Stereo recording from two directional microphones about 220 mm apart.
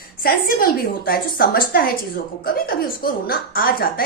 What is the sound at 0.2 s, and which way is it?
A woman's voice, 40° left (ahead or behind).